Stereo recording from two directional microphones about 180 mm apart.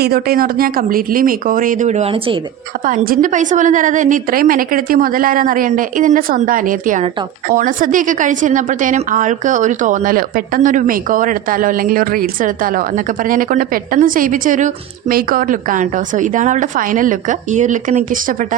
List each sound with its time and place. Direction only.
0.0 s a woman's voice: 55° right (ahead or behind); by 2.4 s 30° right (ahead or behind)
2.8 s a woman's voice: 45° right (ahead or behind)